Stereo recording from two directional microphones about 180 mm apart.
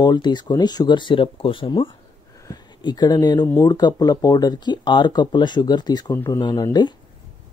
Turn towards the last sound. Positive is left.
turn(degrees=20)  # may be behind; listen again after turning